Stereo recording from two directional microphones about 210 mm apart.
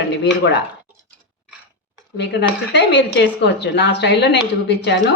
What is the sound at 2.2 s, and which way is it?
Speech, 55° left (ahead or behind).